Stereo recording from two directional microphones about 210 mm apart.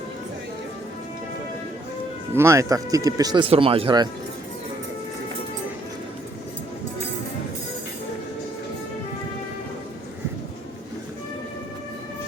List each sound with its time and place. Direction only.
2.3 s speech: 15° right (ahead or behind)